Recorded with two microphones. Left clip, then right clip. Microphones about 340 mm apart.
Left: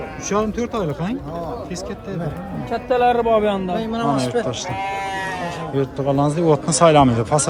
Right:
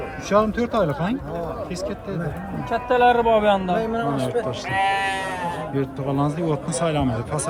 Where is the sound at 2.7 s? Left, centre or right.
Centre.